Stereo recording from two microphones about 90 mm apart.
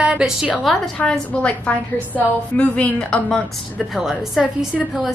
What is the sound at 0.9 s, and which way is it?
A woman's voice, 10° left (ahead or behind).